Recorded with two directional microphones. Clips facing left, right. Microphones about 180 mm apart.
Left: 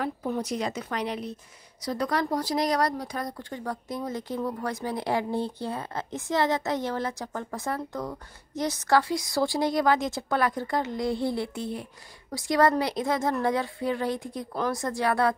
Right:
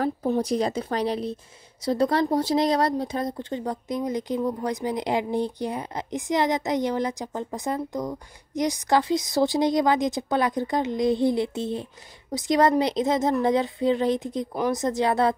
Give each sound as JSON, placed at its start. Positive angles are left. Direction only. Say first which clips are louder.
{"t": 0.0, "sound": "speech", "louder": "right 5 dB", "side_deg": -30}